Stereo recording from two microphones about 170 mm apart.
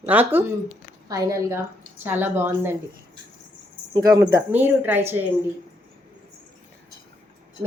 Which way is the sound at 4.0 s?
25° right (ahead or behind).